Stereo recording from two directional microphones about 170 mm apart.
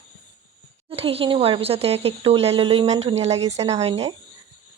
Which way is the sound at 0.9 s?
35° right (ahead or behind).